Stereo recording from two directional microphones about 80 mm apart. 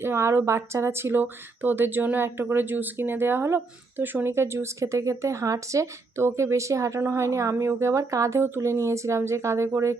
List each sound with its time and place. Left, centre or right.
0.0 s speech: right